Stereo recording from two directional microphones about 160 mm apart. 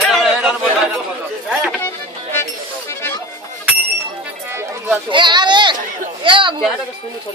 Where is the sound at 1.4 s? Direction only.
5° right (ahead or behind).